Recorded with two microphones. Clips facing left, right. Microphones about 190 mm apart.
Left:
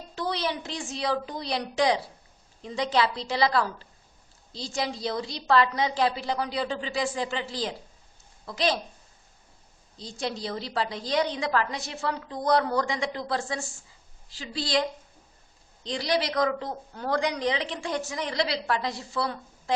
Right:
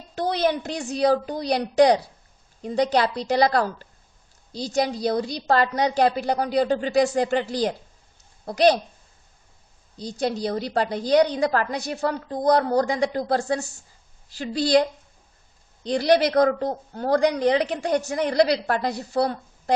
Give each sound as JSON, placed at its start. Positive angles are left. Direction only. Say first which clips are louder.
{"t": 0.3, "sound": "speech", "louder": "right 7 dB", "side_deg": -50}
{"t": 10.2, "sound": "speech", "louder": "right 7 dB", "side_deg": -45}